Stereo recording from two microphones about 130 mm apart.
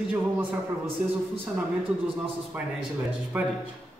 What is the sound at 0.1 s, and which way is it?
Speech, 10° right (ahead or behind).